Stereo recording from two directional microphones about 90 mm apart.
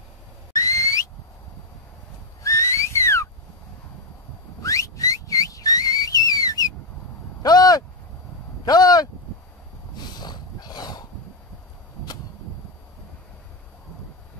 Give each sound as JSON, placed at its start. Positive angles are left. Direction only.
{"t": 0.6, "sound": "whistle", "side_deg": 40}
{"t": 2.4, "sound": "whistling", "side_deg": 35}
{"t": 4.6, "sound": "whistling", "side_deg": 40}
{"t": 7.4, "sound": "a sound", "side_deg": 45}
{"t": 10.1, "sound": "dog", "side_deg": 50}